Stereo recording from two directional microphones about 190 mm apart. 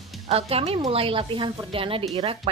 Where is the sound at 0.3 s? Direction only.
35° right (ahead or behind).